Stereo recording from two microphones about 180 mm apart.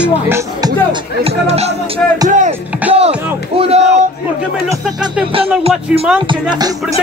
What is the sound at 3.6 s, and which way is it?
Speech, 35° right (ahead or behind).